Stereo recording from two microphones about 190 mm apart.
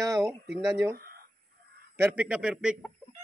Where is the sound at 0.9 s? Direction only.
50° right (ahead or behind).